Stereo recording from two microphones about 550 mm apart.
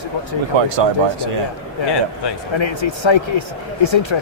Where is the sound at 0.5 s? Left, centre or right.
Right.